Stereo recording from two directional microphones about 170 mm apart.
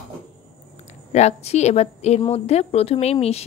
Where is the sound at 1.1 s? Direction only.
40° left (ahead or behind).